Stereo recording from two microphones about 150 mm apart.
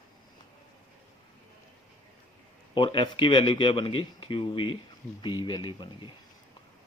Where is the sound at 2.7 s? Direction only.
35° left (ahead or behind).